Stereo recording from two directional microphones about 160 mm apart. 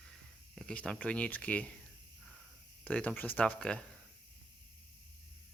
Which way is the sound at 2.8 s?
10° left (ahead or behind).